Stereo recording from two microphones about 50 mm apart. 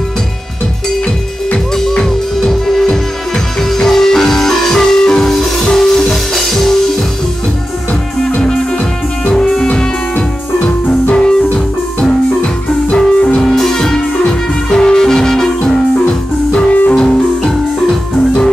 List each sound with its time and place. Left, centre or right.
1.8 s music: centre
8.4 s music: centre
9.7 s music: left
13.4 s music: centre
16.5 s music: left
16.9 s music: centre